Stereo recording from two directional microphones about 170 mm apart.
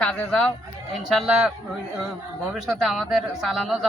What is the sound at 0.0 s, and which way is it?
A man's voice, 5° left (ahead or behind).